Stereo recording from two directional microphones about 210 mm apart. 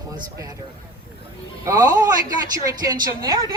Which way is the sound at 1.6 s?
15° right (ahead or behind).